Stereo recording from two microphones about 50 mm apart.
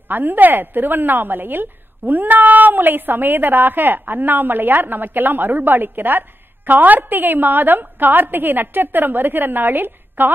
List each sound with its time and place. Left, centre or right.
0.1 s a woman's voice: right